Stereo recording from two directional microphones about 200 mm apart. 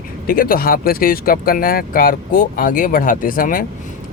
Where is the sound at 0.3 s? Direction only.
45° left (ahead or behind).